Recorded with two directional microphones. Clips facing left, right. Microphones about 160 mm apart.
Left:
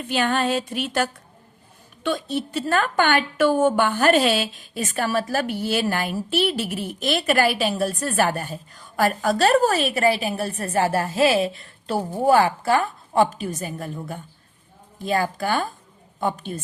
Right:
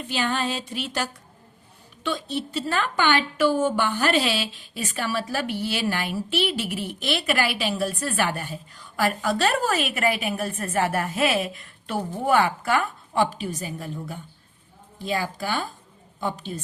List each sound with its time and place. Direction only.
0.1 s a woman's voice: 55° left (ahead or behind)